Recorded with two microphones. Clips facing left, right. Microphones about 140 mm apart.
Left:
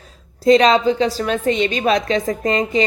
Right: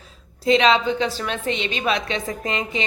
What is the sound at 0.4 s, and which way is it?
A woman's voice, 40° left (ahead or behind).